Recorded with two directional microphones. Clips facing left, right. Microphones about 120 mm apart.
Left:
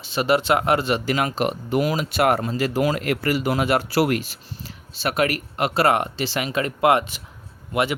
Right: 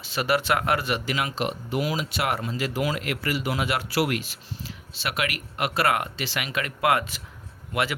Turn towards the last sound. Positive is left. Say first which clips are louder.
# left 4 dB
turn(degrees=20)  # may be behind; listen again after turning